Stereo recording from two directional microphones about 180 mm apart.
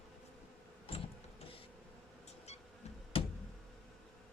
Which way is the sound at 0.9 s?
30° left (ahead or behind).